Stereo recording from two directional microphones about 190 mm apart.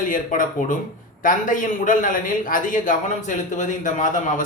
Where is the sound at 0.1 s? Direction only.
45° left (ahead or behind).